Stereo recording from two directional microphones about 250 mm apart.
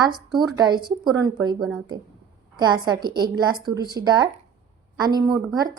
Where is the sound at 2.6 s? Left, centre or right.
Centre.